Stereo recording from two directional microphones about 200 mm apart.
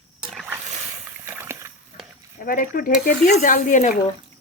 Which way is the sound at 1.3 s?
10° right (ahead or behind).